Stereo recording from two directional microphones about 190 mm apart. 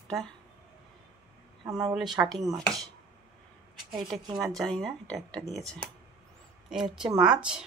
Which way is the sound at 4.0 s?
20° right (ahead or behind).